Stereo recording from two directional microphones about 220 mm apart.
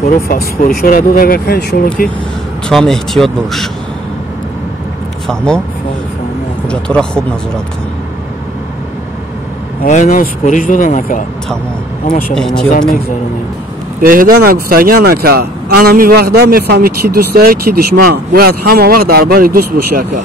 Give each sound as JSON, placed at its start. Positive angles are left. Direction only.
{"t": 0.0, "sound": "speech", "side_deg": 45}
{"t": 2.7, "sound": "speech", "side_deg": 0}
{"t": 5.2, "sound": "speech", "side_deg": 5}
{"t": 6.7, "sound": "speech", "side_deg": 5}
{"t": 9.8, "sound": "speech", "side_deg": 35}
{"t": 12.4, "sound": "speech", "side_deg": 0}
{"t": 14.0, "sound": "speech", "side_deg": -40}